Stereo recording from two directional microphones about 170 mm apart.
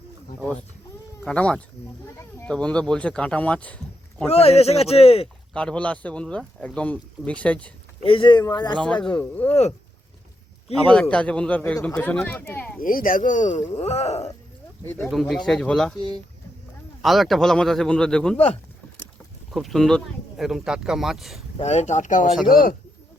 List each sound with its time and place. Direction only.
1.2 s speech: 5° left (ahead or behind)
4.3 s speech: 35° left (ahead or behind)
5.5 s speech: 5° left (ahead or behind)
8.0 s speech: 30° left (ahead or behind)
8.7 s speech: 5° left (ahead or behind)
9.5 s speech: 40° left (ahead or behind)
11.0 s speech: 10° left (ahead or behind)
12.8 s speech: 55° left (ahead or behind)
13.6 s speech: 35° left (ahead or behind)
15.0 s speech: centre (ahead or behind)
17.0 s speech: centre (ahead or behind)
18.3 s speech: 40° left (ahead or behind)
19.5 s speech: centre (ahead or behind)
21.6 s speech: 40° left (ahead or behind); by 22.7 s 55° left (ahead or behind)